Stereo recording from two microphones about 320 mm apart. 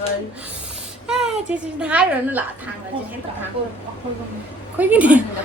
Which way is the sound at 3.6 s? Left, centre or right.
Centre.